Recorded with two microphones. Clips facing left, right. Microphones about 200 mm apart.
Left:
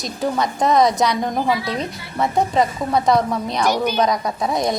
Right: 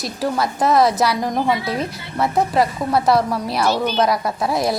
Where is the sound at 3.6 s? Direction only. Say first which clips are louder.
Left 1 dB; 15° left (ahead or behind).